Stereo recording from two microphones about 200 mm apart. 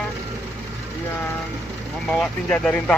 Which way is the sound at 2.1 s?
5° left (ahead or behind).